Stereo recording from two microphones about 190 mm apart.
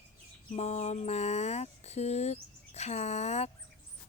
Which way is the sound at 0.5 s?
35° left (ahead or behind).